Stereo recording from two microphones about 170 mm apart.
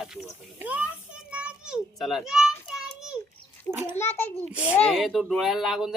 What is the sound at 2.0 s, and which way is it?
Children playing, centre (ahead or behind).